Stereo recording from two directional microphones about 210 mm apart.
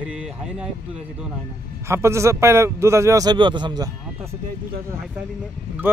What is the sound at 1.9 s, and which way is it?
A man's voice, 15° right (ahead or behind).